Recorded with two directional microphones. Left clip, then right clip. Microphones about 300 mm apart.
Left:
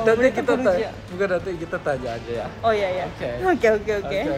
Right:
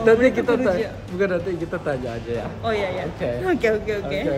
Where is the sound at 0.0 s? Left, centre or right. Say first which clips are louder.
Right 2 dB; centre.